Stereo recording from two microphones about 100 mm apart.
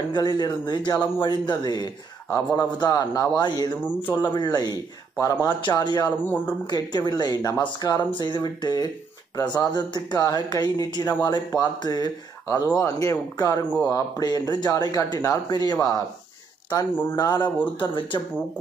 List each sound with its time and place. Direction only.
0.1 s speech: 45° left (ahead or behind)
6.2 s speech: 15° left (ahead or behind)
6.7 s speech: 45° left (ahead or behind)
12.8 s speech: 30° left (ahead or behind)
16.9 s speech: 20° left (ahead or behind)
17.7 s speech: 55° left (ahead or behind)